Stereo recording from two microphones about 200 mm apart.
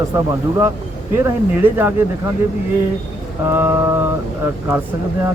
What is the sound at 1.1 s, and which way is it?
Speech, 10° right (ahead or behind).